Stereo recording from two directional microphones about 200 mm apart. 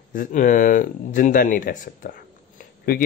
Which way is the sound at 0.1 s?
40° left (ahead or behind).